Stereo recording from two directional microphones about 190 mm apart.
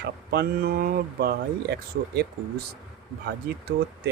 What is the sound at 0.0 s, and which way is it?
Speech, 60° right (ahead or behind).